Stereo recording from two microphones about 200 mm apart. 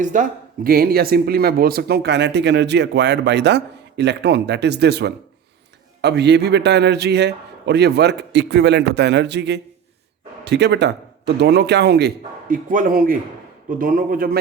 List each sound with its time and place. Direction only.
0.0 s a man's voice: 40° right (ahead or behind)